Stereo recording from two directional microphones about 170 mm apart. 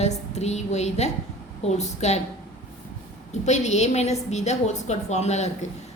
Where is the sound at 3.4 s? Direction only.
40° left (ahead or behind).